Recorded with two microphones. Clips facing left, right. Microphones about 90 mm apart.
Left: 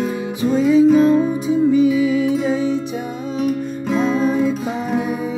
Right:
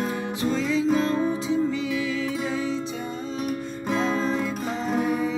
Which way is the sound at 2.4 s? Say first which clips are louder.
Left 8 dB; 60° left (ahead or behind).